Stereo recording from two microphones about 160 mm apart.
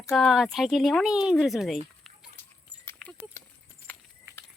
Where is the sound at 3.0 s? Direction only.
5° left (ahead or behind).